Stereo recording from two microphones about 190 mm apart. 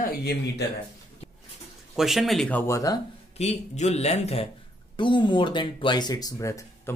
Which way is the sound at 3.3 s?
35° left (ahead or behind).